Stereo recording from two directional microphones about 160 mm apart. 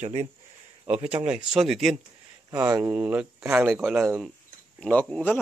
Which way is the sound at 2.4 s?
25° right (ahead or behind).